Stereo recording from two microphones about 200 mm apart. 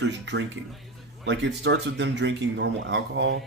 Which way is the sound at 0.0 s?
60° right (ahead or behind).